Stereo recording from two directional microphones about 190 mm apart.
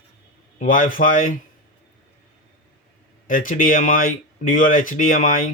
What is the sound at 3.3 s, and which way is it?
Speech, 45° left (ahead or behind).